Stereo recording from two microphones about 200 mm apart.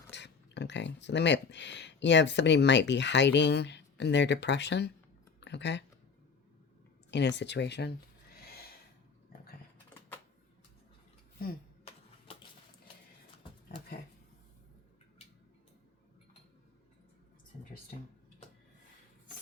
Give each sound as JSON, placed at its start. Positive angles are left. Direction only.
{"t": 0.1, "sound": "speech", "side_deg": 60}
{"t": 5.4, "sound": "a sound", "side_deg": 60}
{"t": 7.1, "sound": "speech", "side_deg": 60}